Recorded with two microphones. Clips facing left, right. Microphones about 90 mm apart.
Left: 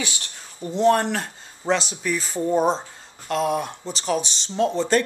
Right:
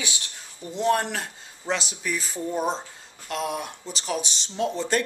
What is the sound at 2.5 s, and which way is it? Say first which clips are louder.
Speech: left 7 dB; 30° left (ahead or behind).